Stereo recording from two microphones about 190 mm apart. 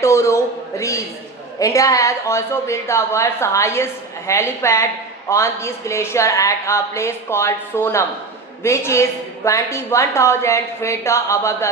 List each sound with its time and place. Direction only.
0.0 s a man's voice: 15° left (ahead or behind)